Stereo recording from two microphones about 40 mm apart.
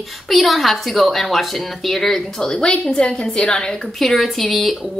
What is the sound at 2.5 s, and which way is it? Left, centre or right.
A woman's voice, left.